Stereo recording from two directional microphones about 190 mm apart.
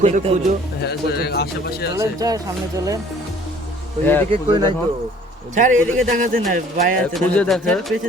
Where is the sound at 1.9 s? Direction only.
20° right (ahead or behind).